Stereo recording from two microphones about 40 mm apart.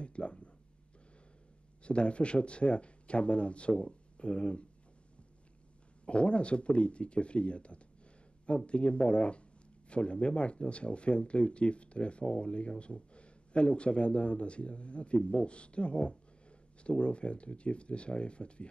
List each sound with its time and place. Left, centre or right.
0.0 s a sound: left
1.8 s speech: left
6.0 s speech: left